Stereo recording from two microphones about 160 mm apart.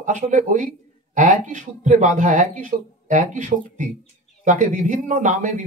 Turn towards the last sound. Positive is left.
turn(degrees=-50)  # may be behind; listen again after turning